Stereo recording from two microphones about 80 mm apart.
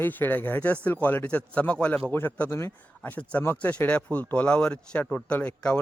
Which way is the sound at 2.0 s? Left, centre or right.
Left.